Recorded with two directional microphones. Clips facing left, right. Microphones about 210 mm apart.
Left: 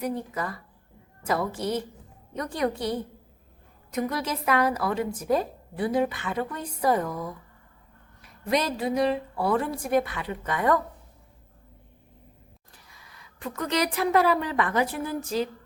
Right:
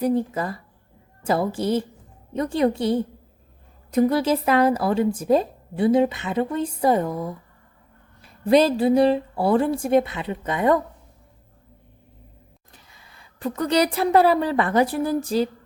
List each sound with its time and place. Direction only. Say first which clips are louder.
0.0 s a woman's voice: right 8 dB; 30° right (ahead or behind)
12.7 s speech: right 2 dB; 25° right (ahead or behind)